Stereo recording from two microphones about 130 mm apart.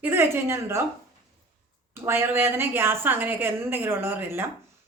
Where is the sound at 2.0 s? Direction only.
20° right (ahead or behind).